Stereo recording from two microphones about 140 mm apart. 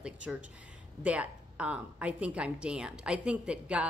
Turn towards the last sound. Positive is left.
turn(degrees=-10)  # may be behind; listen again after turning